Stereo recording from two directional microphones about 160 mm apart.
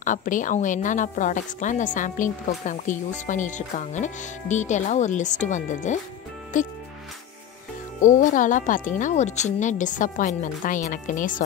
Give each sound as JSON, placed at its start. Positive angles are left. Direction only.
{"t": 0.0, "sound": "a woman's voice", "side_deg": 55}
{"t": 8.0, "sound": "a woman's voice", "side_deg": 50}